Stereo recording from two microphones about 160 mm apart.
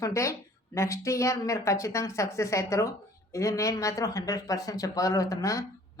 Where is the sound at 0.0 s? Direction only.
20° left (ahead or behind).